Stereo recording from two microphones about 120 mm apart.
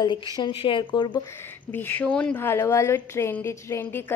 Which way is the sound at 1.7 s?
15° left (ahead or behind).